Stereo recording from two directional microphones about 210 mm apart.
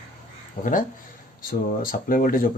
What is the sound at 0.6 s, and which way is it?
Speech, 40° left (ahead or behind).